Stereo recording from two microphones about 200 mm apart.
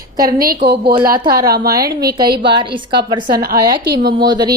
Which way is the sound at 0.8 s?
20° right (ahead or behind).